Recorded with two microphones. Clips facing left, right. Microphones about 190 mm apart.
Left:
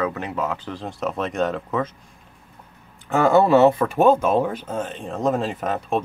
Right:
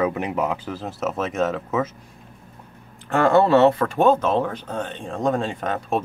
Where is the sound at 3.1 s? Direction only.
5° left (ahead or behind).